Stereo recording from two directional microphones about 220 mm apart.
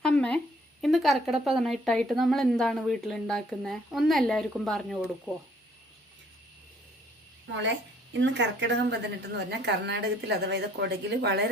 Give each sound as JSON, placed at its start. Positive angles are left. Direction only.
{"t": 0.0, "sound": "a sound", "side_deg": 5}
{"t": 0.8, "sound": "speech", "side_deg": 0}
{"t": 8.2, "sound": "a woman's voice", "side_deg": -55}